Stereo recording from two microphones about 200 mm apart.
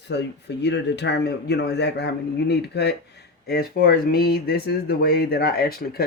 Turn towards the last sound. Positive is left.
turn(degrees=50)  # may be behind; listen again after turning